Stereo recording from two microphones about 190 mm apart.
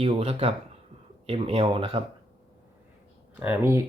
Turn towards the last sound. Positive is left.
turn(degrees=-10)  # may be behind; listen again after turning